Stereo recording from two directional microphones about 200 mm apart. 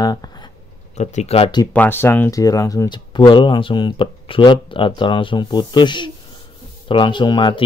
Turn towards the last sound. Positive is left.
turn(degrees=25)  # may be behind; listen again after turning